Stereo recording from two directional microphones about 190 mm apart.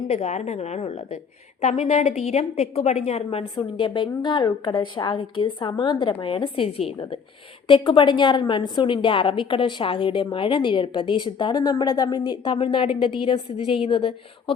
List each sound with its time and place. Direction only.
0.1 s a woman's voice: 35° left (ahead or behind)